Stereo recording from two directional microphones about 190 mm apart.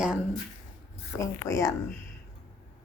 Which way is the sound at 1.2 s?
15° left (ahead or behind).